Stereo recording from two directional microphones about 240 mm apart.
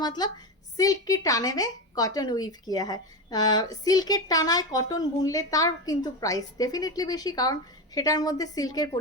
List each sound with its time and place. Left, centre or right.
0.0 s a woman's voice: centre